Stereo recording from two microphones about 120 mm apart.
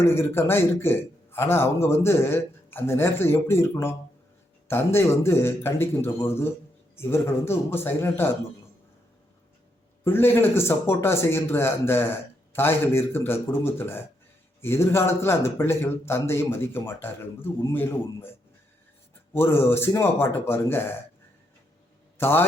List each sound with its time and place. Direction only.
0.0 s a man's voice: 20° left (ahead or behind)
10.0 s a man's voice: 20° left (ahead or behind)
22.2 s a man's voice: 20° left (ahead or behind)